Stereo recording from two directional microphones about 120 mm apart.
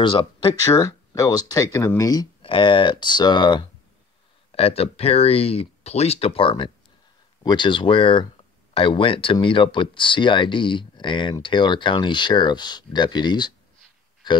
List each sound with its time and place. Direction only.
0.0 s speech: 40° left (ahead or behind)
0.7 s speech: 30° left (ahead or behind)
2.4 s speech: 45° left (ahead or behind)
4.5 s speech: 55° left (ahead or behind); by 14.4 s 40° left (ahead or behind)